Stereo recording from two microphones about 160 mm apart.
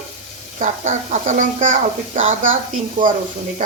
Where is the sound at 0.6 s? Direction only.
50° right (ahead or behind).